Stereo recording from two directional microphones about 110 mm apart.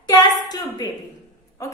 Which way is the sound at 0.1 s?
40° left (ahead or behind).